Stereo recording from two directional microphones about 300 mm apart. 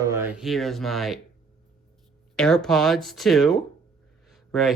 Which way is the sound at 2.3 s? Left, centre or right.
Centre.